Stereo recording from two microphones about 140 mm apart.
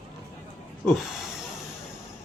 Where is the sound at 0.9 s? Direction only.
Centre (ahead or behind).